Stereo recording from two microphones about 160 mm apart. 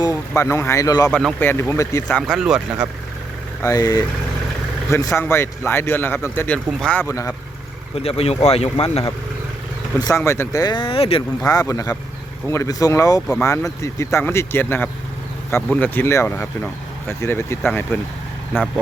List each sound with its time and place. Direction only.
0.0 s speech: 20° left (ahead or behind)
1.1 s speech: 10° left (ahead or behind)
2.2 s speech: 5° right (ahead or behind)
3.6 s speech: 20° left (ahead or behind)
6.7 s speech: centre (ahead or behind)
7.1 s speech: 20° left (ahead or behind)
7.9 s speech: 40° left (ahead or behind)
10.0 s speech: 20° left (ahead or behind); by 11.2 s 35° left (ahead or behind)
11.4 s speech: 20° left (ahead or behind)